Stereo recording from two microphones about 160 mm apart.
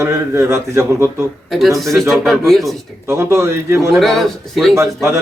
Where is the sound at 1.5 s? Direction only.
Centre (ahead or behind).